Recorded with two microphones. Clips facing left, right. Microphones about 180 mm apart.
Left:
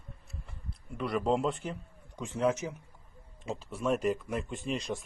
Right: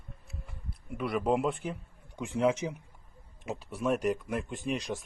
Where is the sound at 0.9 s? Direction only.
5° right (ahead or behind).